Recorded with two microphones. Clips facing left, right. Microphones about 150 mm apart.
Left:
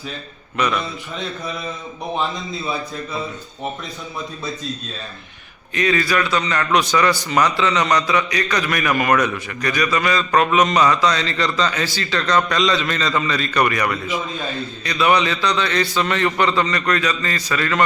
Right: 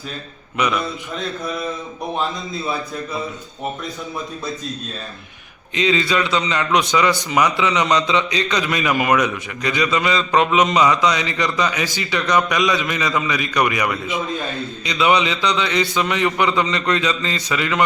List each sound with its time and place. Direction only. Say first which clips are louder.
0.5 s a man's voice: even; 15° right (ahead or behind)
0.8 s a man's voice: right 2 dB; centre (ahead or behind)
5.7 s a man's voice: even; 20° right (ahead or behind)
14.3 s a man's voice: right 1 dB; centre (ahead or behind)
14.8 s a man's voice: even; 20° right (ahead or behind)